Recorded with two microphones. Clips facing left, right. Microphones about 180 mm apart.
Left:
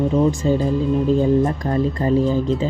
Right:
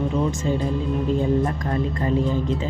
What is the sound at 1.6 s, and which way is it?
Speech, 30° left (ahead or behind).